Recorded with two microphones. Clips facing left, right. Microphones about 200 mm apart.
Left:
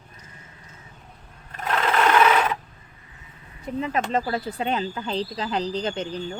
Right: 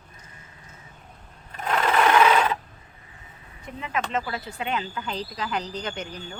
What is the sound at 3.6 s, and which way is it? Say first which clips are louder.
Speech: left 5 dB; 35° left (ahead or behind).